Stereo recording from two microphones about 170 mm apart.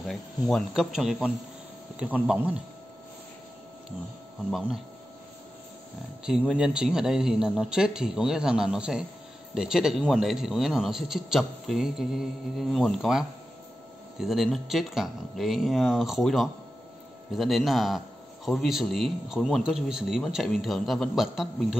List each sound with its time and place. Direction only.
0.1 s speech: centre (ahead or behind)
4.5 s speech: centre (ahead or behind)
6.2 s speech: 5° right (ahead or behind)
14.2 s speech: centre (ahead or behind)